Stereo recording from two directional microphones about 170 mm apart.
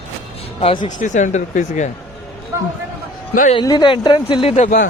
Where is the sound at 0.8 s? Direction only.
45° left (ahead or behind).